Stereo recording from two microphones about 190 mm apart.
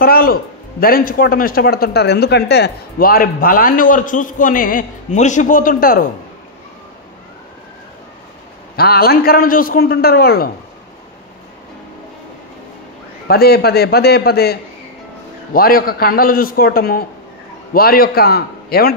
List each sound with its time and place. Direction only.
0.0 s a man's voice: 50° left (ahead or behind)
8.7 s a man's voice: 55° left (ahead or behind)
13.3 s a man's voice: 55° left (ahead or behind)